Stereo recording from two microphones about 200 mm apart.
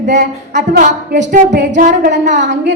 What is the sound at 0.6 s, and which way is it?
A woman's voice, 40° right (ahead or behind).